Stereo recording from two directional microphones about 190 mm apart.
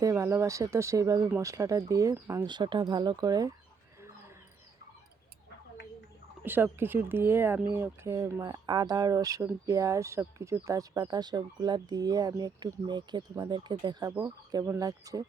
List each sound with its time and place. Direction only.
0.0 s speech: 15° right (ahead or behind)
6.4 s speech: 10° right (ahead or behind)